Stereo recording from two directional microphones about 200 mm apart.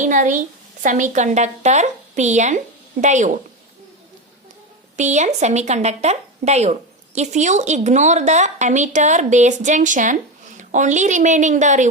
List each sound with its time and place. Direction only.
0.0 s a woman's voice: 40° right (ahead or behind)
4.9 s a woman's voice: 35° right (ahead or behind)